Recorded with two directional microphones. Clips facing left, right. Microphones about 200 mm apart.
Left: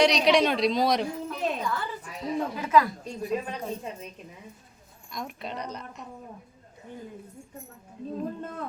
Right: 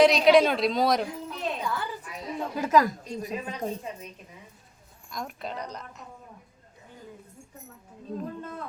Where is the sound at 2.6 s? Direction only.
40° right (ahead or behind).